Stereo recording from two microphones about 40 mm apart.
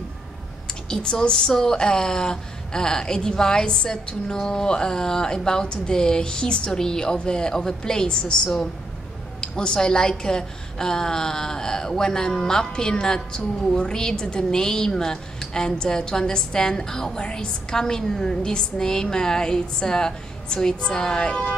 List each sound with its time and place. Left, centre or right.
0.8 s a woman's voice: centre